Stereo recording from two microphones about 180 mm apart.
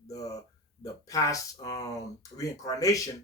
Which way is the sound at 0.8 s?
20° left (ahead or behind).